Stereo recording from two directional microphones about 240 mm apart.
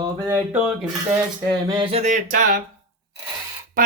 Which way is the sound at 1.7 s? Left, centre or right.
Right.